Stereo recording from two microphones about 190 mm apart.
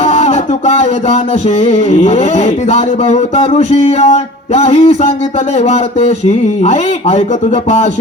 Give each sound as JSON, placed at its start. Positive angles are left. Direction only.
{"t": 0.0, "sound": "music", "side_deg": 35}